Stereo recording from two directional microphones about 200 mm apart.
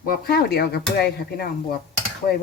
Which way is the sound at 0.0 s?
45° left (ahead or behind).